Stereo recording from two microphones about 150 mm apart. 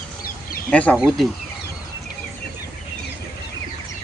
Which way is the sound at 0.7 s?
10° left (ahead or behind).